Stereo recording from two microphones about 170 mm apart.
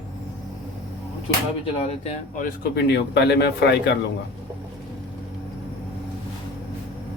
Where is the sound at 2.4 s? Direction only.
75° left (ahead or behind).